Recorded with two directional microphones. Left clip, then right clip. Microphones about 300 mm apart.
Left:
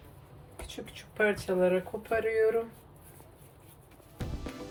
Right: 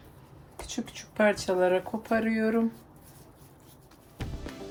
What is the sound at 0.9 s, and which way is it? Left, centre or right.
Speech, right.